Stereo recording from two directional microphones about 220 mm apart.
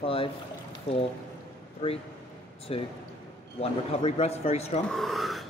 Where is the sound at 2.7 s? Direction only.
25° left (ahead or behind).